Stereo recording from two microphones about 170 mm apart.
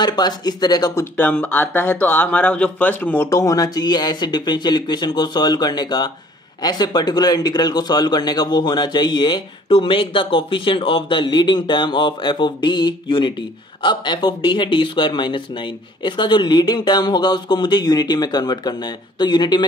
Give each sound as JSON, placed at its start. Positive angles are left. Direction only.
{"t": 0.0, "sound": "speech", "side_deg": 25}
{"t": 1.1, "sound": "speech", "side_deg": 10}